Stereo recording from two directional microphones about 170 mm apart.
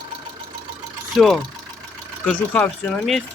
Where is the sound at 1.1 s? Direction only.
Centre (ahead or behind).